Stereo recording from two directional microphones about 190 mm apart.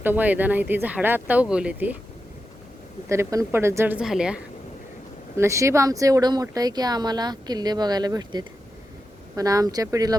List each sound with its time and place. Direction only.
0.0 s speech: 10° right (ahead or behind)
3.1 s speech: 15° right (ahead or behind)
5.4 s speech: 15° right (ahead or behind)